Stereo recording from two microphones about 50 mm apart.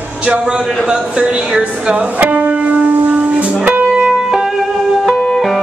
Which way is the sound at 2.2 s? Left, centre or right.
Right.